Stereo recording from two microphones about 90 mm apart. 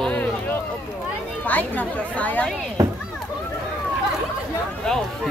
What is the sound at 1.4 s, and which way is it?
Speech, 20° left (ahead or behind).